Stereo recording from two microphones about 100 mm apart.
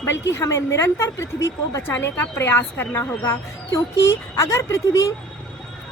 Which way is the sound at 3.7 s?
30° left (ahead or behind).